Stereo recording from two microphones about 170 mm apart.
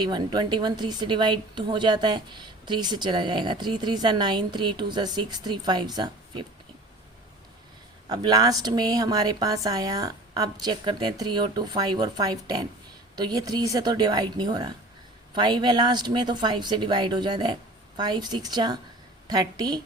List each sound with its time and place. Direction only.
0.0 s a woman's voice: 25° right (ahead or behind)
8.1 s a woman's voice: 25° right (ahead or behind)